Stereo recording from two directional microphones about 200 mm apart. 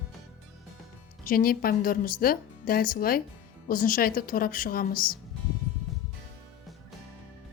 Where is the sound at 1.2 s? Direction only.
45° left (ahead or behind).